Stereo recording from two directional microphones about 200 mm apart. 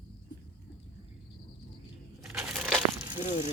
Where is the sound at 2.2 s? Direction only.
Centre (ahead or behind).